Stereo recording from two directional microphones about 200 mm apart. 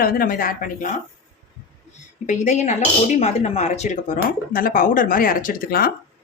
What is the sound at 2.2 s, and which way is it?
Speech, 35° left (ahead or behind).